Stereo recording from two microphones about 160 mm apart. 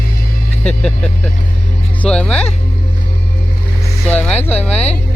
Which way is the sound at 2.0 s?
5° left (ahead or behind).